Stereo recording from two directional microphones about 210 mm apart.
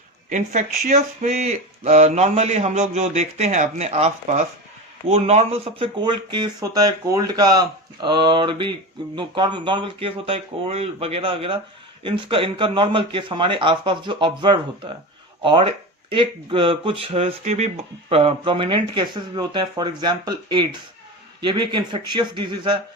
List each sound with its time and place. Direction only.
0.3 s speech: 35° right (ahead or behind)